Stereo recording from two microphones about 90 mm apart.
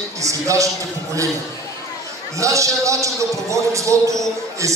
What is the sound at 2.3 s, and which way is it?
A man's voice, 35° right (ahead or behind).